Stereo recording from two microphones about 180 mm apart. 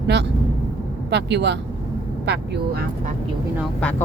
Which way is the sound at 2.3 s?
65° right (ahead or behind).